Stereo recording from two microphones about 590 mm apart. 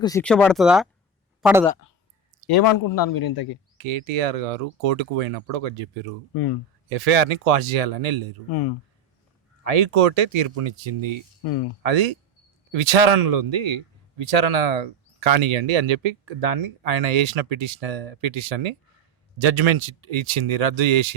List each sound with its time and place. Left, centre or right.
0.0 s speech: centre
2.5 s a man's voice: left
3.8 s speech: right
9.6 s speech: right